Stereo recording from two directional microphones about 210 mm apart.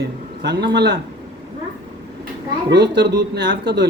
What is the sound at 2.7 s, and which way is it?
A woman's voice, 55° right (ahead or behind).